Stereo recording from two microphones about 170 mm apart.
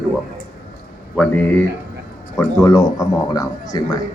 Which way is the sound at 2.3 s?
20° left (ahead or behind).